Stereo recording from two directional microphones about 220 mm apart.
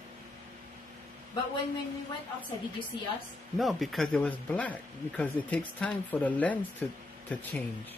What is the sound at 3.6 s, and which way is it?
Speech, centre (ahead or behind).